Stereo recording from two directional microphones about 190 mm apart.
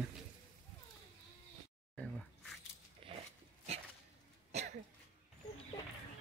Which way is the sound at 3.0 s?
30° right (ahead or behind).